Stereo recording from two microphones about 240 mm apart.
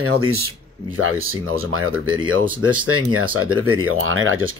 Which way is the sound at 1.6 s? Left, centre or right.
Right.